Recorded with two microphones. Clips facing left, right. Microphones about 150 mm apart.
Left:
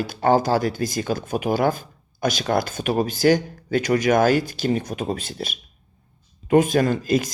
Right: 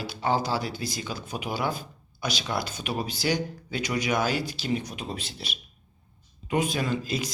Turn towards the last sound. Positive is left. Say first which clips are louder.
# left 9 dB
turn(degrees=50)  # may be behind; listen again after turning